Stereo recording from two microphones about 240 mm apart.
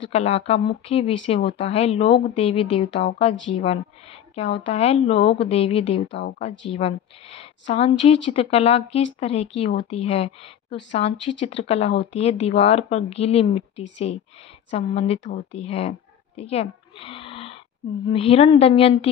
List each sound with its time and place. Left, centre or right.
0.0 s speech: left
16.3 s a sound: left
18.1 s speech: left